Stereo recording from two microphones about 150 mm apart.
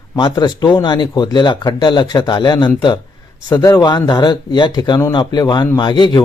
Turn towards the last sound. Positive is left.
turn(degrees=30)  # may be behind; listen again after turning